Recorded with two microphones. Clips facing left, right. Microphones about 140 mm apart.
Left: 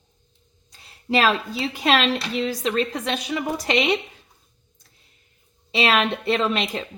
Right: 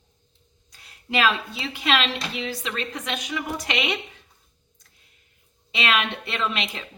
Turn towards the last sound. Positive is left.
turn(degrees=40)  # may be behind; listen again after turning